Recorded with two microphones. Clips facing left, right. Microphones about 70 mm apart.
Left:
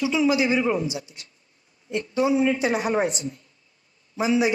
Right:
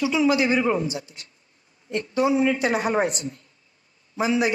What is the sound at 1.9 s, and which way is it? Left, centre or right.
A woman's voice, right.